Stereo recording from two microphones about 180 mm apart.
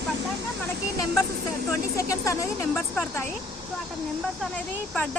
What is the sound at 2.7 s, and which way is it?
Speech, 5° left (ahead or behind).